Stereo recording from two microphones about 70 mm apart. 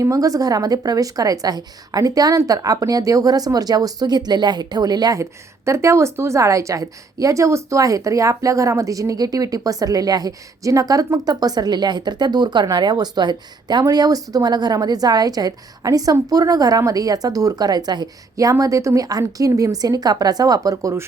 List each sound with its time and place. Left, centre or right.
0.0 s a woman's voice: right
5.1 s a woman's voice: right
13.8 s a woman's voice: right
18.6 s a woman's voice: right